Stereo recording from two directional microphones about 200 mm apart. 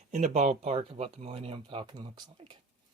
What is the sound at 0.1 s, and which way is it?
Speech, 35° right (ahead or behind).